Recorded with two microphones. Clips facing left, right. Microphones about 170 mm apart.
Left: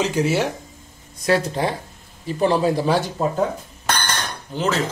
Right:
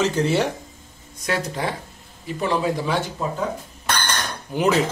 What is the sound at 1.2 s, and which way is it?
A man's voice, 30° left (ahead or behind).